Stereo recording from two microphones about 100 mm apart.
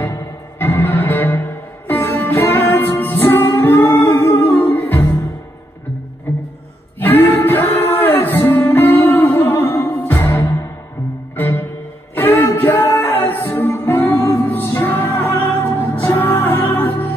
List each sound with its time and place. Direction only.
0.0 s music: 25° left (ahead or behind)
7.0 s music: 20° left (ahead or behind)